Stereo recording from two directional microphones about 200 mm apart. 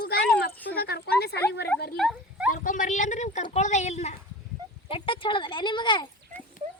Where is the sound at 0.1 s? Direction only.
50° left (ahead or behind).